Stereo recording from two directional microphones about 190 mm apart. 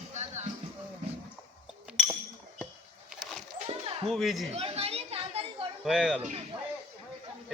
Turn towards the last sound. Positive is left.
turn(degrees=0)  # may be behind; listen again after turning